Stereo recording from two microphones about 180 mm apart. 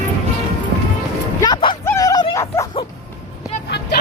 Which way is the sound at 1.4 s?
20° left (ahead or behind).